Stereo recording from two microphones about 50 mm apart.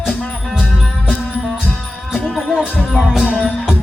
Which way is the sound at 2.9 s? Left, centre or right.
Centre.